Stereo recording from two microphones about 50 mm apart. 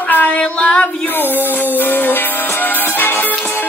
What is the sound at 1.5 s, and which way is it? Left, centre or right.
Music, left.